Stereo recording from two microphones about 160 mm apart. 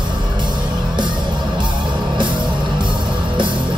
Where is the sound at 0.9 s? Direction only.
30° right (ahead or behind).